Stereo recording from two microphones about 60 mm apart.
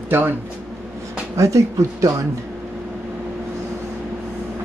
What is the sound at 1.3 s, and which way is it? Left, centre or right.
Speech, right.